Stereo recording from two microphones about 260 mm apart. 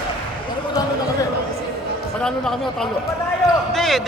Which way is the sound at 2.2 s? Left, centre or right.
Centre.